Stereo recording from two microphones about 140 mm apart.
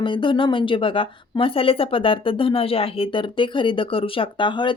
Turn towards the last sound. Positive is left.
turn(degrees=35)  # may be behind; listen again after turning